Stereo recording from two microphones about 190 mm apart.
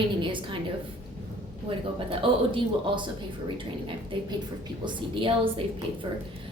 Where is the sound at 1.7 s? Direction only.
30° right (ahead or behind).